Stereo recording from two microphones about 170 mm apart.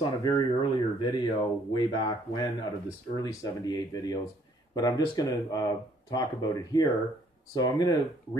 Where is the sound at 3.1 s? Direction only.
20° left (ahead or behind).